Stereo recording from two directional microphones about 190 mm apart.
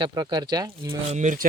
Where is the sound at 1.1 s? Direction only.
40° right (ahead or behind).